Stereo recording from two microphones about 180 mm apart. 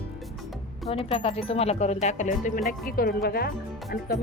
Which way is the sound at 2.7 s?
55° left (ahead or behind).